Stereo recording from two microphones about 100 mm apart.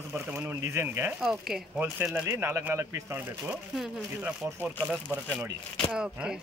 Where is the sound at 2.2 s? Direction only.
25° right (ahead or behind).